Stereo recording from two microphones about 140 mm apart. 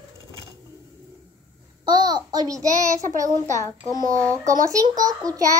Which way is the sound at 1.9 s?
30° right (ahead or behind).